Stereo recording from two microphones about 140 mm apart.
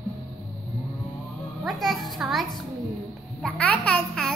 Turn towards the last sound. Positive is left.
turn(degrees=5)  # may be behind; listen again after turning